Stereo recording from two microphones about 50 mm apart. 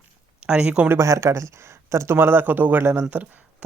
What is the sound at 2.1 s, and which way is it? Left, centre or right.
Speech, right.